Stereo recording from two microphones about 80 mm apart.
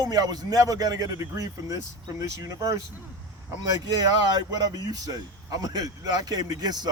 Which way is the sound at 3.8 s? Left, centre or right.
Right.